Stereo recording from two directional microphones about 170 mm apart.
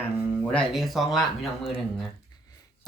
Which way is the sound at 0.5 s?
Centre (ahead or behind).